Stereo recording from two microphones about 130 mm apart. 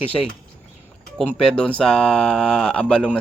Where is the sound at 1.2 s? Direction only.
5° left (ahead or behind).